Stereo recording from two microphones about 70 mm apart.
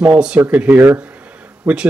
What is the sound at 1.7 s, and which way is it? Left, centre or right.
Speech, centre.